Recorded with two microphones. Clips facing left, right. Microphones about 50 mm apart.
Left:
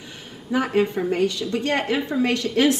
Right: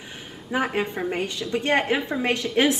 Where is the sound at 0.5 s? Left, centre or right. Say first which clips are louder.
Left 4 dB; centre.